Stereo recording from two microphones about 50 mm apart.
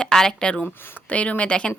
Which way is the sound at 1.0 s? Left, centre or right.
Left.